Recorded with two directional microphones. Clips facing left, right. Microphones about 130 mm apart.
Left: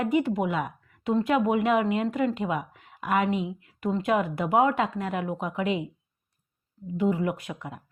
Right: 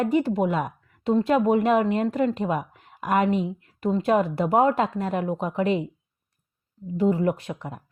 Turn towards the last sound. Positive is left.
turn(degrees=-30)  # may be behind; listen again after turning